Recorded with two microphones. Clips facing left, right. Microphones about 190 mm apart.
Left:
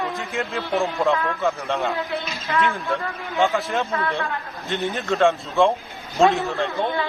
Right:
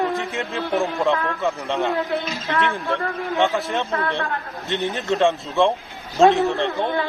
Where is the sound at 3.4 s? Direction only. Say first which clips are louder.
Left 1 dB; centre (ahead or behind).